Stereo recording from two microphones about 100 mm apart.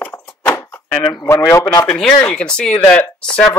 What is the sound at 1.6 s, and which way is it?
Speech, 35° left (ahead or behind).